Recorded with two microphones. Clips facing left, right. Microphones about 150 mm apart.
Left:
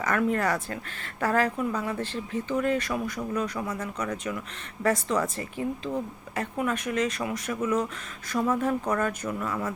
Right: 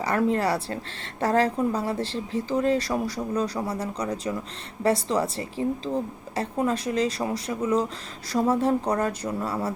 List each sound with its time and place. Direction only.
0.0 s speech: 30° right (ahead or behind)